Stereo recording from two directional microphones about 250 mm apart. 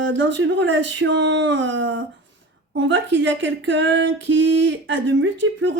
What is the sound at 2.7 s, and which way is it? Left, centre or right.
Speech, right.